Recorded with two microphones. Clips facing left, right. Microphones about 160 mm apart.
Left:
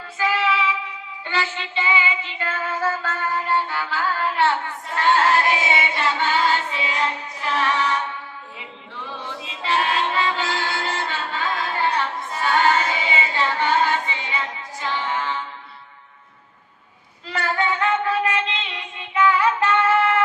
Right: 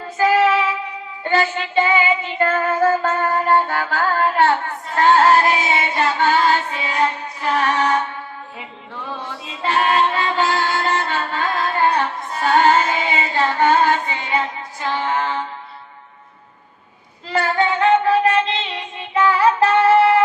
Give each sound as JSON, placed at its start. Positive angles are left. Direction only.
{"t": 0.2, "sound": "female singing", "side_deg": -45}
{"t": 1.2, "sound": "child singing", "side_deg": -45}
{"t": 9.0, "sound": "music", "side_deg": -45}
{"t": 17.3, "sound": "child singing", "side_deg": -30}